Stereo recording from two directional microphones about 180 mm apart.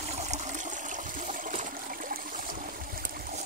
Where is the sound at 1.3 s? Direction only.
45° right (ahead or behind).